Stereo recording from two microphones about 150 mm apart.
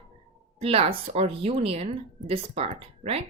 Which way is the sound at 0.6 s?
40° right (ahead or behind).